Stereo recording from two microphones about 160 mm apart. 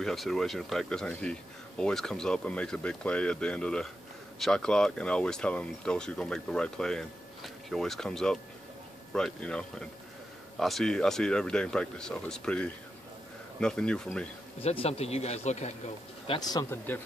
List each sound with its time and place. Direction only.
0.0 s speech: centre (ahead or behind)
14.6 s speech: 40° left (ahead or behind)
16.3 s speech: 25° left (ahead or behind)